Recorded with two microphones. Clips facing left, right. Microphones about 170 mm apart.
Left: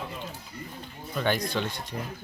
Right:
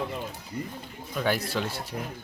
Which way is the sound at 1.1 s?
5° right (ahead or behind).